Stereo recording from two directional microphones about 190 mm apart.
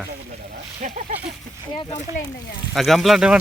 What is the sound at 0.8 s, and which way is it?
Speech, 40° right (ahead or behind).